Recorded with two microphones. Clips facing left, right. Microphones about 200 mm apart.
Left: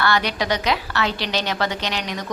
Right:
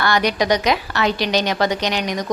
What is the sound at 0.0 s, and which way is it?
A woman's voice, 15° right (ahead or behind).